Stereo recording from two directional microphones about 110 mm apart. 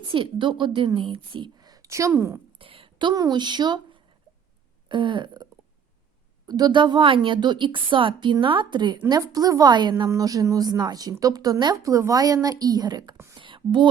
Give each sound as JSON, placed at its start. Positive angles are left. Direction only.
{"t": 0.0, "sound": "a woman's voice", "side_deg": -50}
{"t": 2.6, "sound": "speech", "side_deg": -55}
{"t": 4.9, "sound": "a woman's voice", "side_deg": -45}
{"t": 6.5, "sound": "a woman's voice", "side_deg": -40}
{"t": 13.3, "sound": "a sound", "side_deg": -45}